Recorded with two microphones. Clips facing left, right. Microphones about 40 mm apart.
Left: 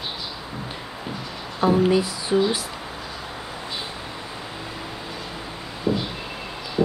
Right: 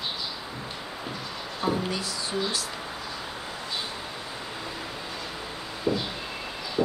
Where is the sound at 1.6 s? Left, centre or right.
Left.